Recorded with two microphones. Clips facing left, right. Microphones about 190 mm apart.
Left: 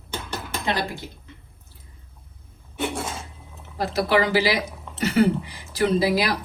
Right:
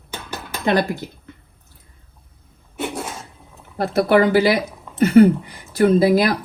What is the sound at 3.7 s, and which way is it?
Speech, 55° right (ahead or behind).